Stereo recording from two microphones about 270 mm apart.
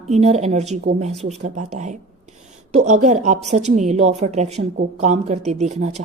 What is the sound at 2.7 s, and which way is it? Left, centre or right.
Speech, right.